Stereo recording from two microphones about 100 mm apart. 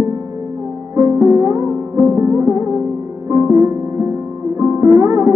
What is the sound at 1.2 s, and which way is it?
Music, 30° right (ahead or behind).